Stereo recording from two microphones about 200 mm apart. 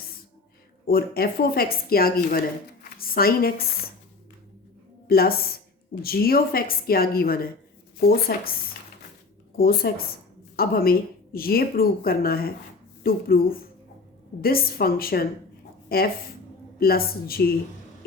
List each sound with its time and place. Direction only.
0.9 s a woman's voice: 50° left (ahead or behind)
5.0 s a woman's voice: 50° left (ahead or behind)
9.6 s a woman's voice: 50° left (ahead or behind)